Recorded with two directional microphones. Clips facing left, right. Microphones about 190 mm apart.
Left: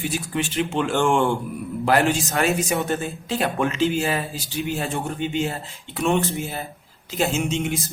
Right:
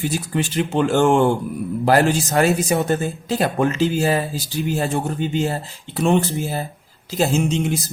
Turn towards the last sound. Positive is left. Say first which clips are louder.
# right 4 dB
turn(degrees=-35)  # may be behind; listen again after turning